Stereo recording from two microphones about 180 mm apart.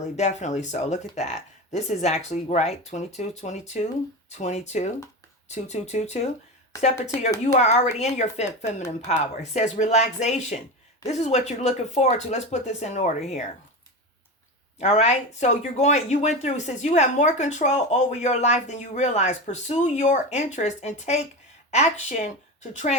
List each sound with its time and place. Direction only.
0.2 s speech: 40° left (ahead or behind)
14.8 s speech: 40° left (ahead or behind)